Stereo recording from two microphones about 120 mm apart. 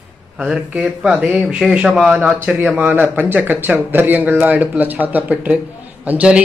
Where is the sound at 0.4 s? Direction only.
10° right (ahead or behind).